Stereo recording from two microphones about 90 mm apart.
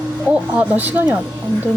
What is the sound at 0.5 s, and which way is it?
Speech, 15° right (ahead or behind).